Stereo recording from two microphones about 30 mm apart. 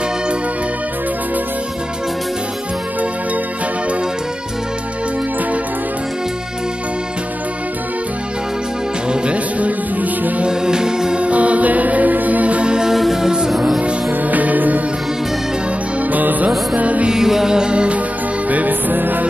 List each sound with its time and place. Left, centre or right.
9.1 s music: right
10.5 s music: right
11.1 s music: right
13.0 s music: centre
14.2 s music: right
16.1 s music: right
16.4 s music: right
17.1 s music: centre
17.5 s music: right
17.7 s music: right
18.5 s music: right